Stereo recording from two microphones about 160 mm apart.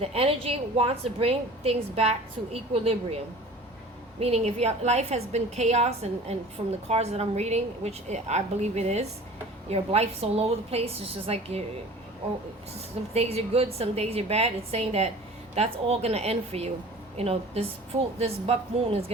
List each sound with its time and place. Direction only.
0.0 s a woman's voice: 40° right (ahead or behind)
4.2 s a woman's voice: 40° right (ahead or behind)
13.1 s a woman's voice: 40° right (ahead or behind)